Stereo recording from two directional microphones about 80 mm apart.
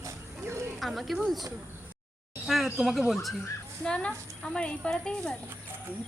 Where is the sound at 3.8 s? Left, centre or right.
Centre.